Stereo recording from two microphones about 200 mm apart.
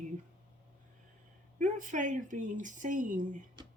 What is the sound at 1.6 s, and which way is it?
Speech, 40° right (ahead or behind).